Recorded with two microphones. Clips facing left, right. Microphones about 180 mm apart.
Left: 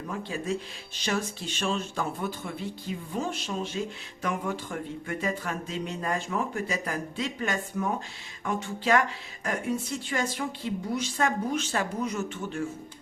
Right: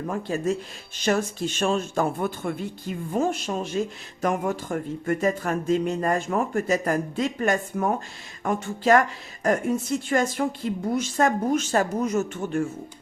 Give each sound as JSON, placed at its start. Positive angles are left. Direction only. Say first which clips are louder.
{"t": 0.1, "sound": "a woman's voice", "louder": "right 5 dB", "side_deg": -45}